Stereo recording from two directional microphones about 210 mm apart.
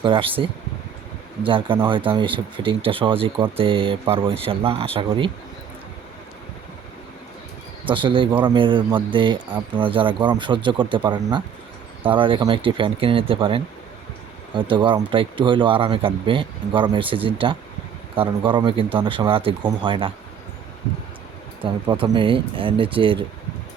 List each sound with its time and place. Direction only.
0.0 s speech: 25° right (ahead or behind)
7.9 s speech: 25° right (ahead or behind)
21.6 s speech: 25° right (ahead or behind)